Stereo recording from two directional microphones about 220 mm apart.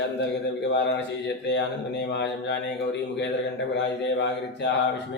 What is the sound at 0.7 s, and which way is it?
Speech, 50° left (ahead or behind).